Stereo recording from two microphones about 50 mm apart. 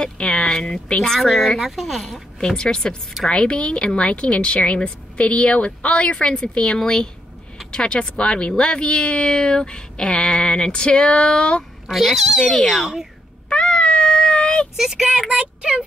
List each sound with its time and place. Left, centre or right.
0.0 s a sound: centre
0.5 s speech: centre
2.4 s speech: centre
11.9 s speech: centre
13.5 s a sound: centre
14.8 s speech: centre
15.2 s speech: right